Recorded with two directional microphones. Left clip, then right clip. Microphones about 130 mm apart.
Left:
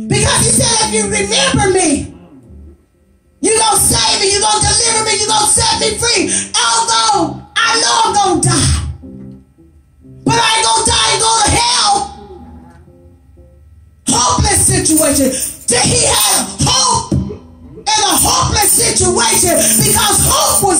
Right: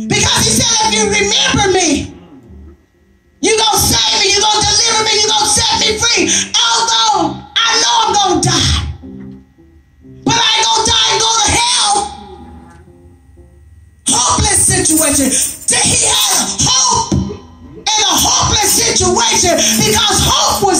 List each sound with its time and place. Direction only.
0.0 s speech: 45° left (ahead or behind)
3.3 s music: 40° left (ahead or behind)
10.2 s music: 40° left (ahead or behind)
14.0 s music: 40° left (ahead or behind)